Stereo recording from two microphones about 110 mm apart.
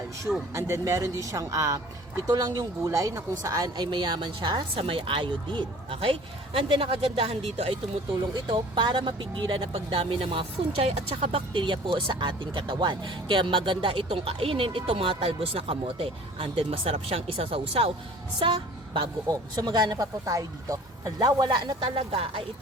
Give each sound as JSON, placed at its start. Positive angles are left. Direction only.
{"t": 0.5, "sound": "a woman's voice", "side_deg": -30}
{"t": 4.7, "sound": "speech", "side_deg": -55}
{"t": 8.2, "sound": "speech", "side_deg": -40}
{"t": 11.5, "sound": "speech", "side_deg": -50}
{"t": 18.3, "sound": "a woman's voice", "side_deg": -45}